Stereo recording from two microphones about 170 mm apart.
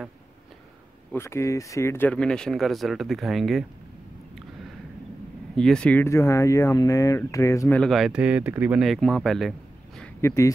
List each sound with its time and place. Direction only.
1.1 s speech: 15° left (ahead or behind); by 3.6 s centre (ahead or behind)
5.6 s speech: 5° left (ahead or behind)
7.8 s speech: centre (ahead or behind)
10.2 s speech: 15° left (ahead or behind)